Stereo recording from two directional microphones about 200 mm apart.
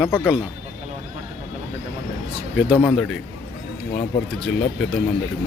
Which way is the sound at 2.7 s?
20° left (ahead or behind).